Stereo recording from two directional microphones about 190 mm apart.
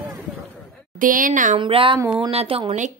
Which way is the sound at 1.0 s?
45° right (ahead or behind).